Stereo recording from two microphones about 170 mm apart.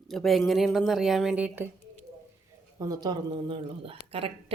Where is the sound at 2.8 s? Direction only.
20° right (ahead or behind).